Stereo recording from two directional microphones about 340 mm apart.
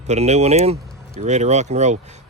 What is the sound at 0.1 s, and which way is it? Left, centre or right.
Speech, centre.